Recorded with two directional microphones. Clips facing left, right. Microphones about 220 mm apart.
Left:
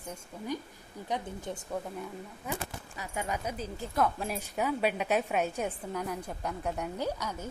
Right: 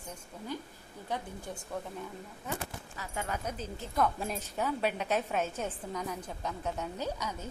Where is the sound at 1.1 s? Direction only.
20° left (ahead or behind).